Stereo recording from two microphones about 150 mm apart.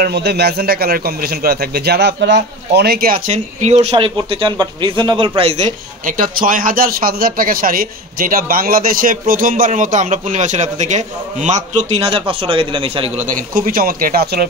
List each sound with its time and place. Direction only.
0.0 s a man's voice: 90° right
3.3 s speech: 45° right (ahead or behind)
3.9 s speech: 35° right (ahead or behind)
6.0 s speech: 65° right (ahead or behind); by 13.1 s 35° right (ahead or behind)
13.3 s speech: 70° right (ahead or behind); by 14.5 s 90° right